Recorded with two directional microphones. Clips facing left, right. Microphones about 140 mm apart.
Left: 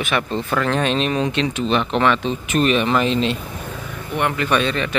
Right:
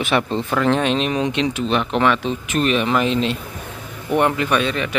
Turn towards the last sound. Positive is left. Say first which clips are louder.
# even
turn(degrees=-10)  # may be behind; listen again after turning